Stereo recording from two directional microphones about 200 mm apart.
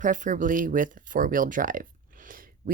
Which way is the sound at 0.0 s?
40° right (ahead or behind).